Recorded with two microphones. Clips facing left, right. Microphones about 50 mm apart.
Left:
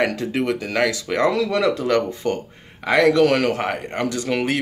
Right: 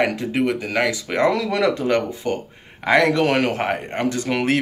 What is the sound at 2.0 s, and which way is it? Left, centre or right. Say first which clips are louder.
Speech: left 1 dB; centre.